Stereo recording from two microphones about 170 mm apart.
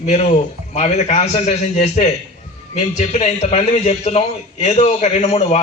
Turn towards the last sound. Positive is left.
turn(degrees=40)  # may be behind; listen again after turning